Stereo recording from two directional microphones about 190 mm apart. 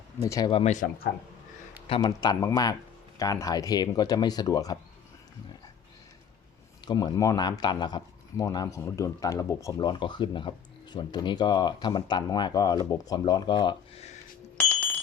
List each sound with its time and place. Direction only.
0.2 s speech: 20° left (ahead or behind)
0.6 s speech: 40° left (ahead or behind)
1.9 s speech: 20° left (ahead or behind)
6.8 s speech: 20° left (ahead or behind)